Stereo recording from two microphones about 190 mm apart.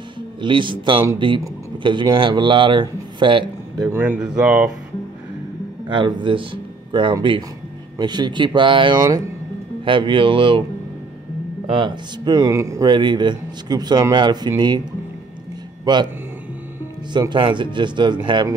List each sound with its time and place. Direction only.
0.4 s speech: 25° right (ahead or behind)
3.9 s speech: 10° right (ahead or behind)
5.9 s speech: 25° right (ahead or behind)
11.7 s speech: 25° right (ahead or behind)
15.8 s speech: 20° right (ahead or behind)
17.1 s speech: 25° right (ahead or behind)